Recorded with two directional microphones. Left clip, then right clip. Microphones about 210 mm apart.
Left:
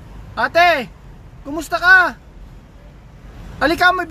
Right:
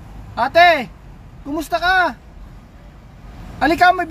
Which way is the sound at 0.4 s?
15° left (ahead or behind).